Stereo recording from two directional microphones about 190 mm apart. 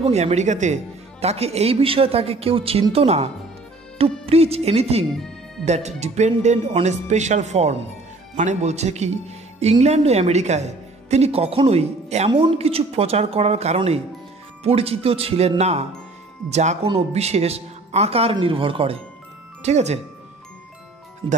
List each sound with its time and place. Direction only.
0.0 s a man's voice: 35° right (ahead or behind)
4.3 s a man's voice: 30° right (ahead or behind)
21.2 s speech: 25° right (ahead or behind)